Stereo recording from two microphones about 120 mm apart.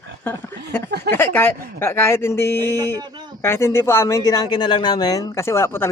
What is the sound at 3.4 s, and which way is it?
Speech, 20° left (ahead or behind).